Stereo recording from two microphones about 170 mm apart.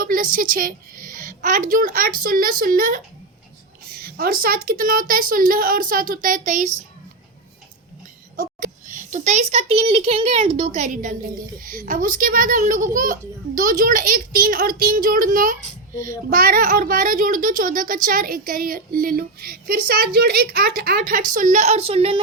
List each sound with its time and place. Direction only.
0.0 s a child's voice: 55° right (ahead or behind)
8.4 s a child's voice: 50° right (ahead or behind)